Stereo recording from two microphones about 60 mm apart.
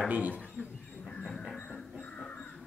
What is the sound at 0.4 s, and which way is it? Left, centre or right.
Speech, right.